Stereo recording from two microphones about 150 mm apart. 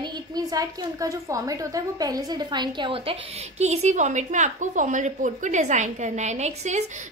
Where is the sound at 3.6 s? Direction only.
45° right (ahead or behind).